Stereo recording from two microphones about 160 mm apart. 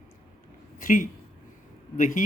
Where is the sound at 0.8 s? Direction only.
55° left (ahead or behind).